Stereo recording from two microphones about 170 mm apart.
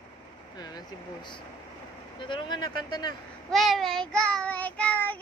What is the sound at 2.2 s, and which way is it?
Speech, 30° left (ahead or behind).